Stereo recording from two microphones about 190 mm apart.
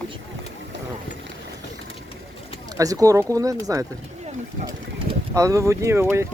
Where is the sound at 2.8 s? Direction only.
20° right (ahead or behind).